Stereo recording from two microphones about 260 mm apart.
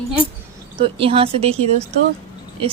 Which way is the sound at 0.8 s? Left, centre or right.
Right.